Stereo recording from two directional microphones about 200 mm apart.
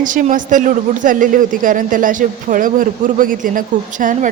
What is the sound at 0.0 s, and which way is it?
A man's voice, 40° right (ahead or behind).